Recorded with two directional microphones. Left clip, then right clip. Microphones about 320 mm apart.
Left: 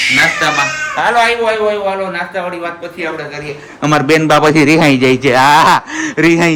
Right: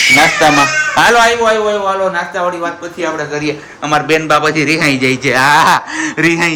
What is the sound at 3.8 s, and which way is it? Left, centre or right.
A man's voice, centre.